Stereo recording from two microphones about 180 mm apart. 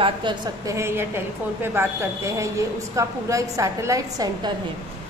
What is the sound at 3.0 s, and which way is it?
A woman's voice, 20° right (ahead or behind).